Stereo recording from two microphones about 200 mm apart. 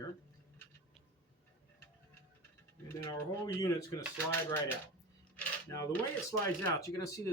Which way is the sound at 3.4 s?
20° left (ahead or behind).